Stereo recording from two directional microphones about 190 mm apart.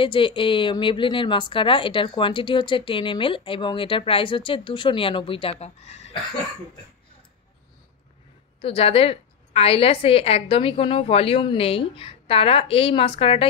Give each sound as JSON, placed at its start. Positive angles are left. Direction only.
{"t": 0.0, "sound": "a woman's voice", "side_deg": 25}
{"t": 8.5, "sound": "a woman's voice", "side_deg": 30}